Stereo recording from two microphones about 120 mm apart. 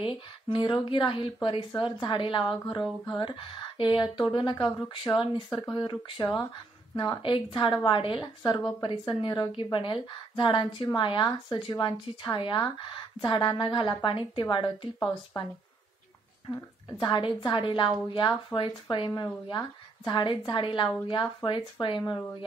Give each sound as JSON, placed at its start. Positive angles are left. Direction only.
{"t": 0.0, "sound": "speech", "side_deg": 45}